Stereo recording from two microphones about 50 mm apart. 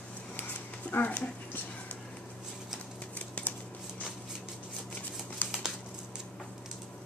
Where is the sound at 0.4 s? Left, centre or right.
Left.